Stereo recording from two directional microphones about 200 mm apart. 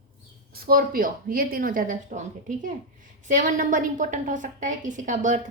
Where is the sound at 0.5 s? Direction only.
50° right (ahead or behind).